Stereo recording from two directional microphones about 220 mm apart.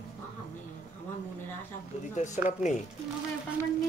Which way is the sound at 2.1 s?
30° left (ahead or behind).